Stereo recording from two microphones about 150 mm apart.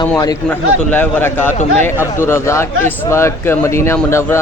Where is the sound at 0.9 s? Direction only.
15° left (ahead or behind).